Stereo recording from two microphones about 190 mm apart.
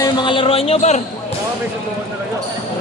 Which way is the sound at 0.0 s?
25° left (ahead or behind).